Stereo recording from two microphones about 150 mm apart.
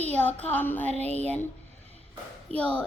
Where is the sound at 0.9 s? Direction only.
45° right (ahead or behind).